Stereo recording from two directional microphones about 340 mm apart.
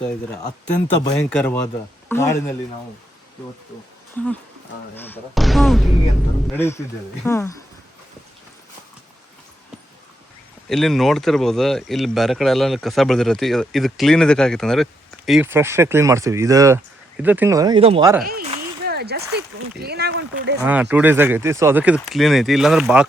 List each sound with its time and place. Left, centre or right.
0.0 s a man's voice: centre
4.9 s a man's voice: centre
10.7 s speech: centre
18.3 s a sound: right
18.9 s speech: right
20.6 s speech: centre